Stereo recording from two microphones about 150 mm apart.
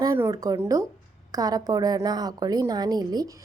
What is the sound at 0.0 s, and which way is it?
A woman's voice, 20° right (ahead or behind).